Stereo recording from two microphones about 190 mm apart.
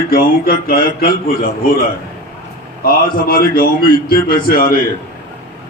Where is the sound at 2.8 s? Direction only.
50° left (ahead or behind).